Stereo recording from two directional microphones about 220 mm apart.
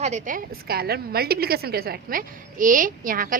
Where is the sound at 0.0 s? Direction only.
35° right (ahead or behind).